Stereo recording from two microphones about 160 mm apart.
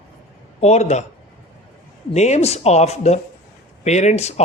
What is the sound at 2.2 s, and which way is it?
A man's voice, 45° left (ahead or behind).